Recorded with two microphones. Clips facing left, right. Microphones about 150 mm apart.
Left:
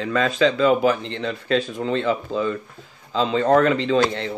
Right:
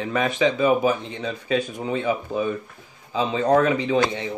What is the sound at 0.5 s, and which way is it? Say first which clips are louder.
Speech: left 2 dB; 90° left.